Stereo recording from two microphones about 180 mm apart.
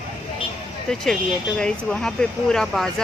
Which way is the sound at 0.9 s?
5° left (ahead or behind).